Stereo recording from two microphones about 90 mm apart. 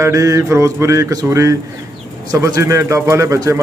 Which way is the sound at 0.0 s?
35° right (ahead or behind).